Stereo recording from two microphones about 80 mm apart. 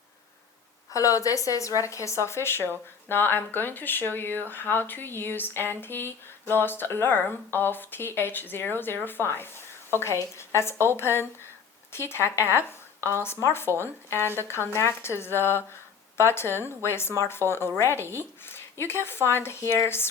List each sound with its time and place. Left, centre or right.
0.9 s speech: left
13.0 s speech: right
13.2 s speech: left
18.0 s speech: right
18.4 s speech: left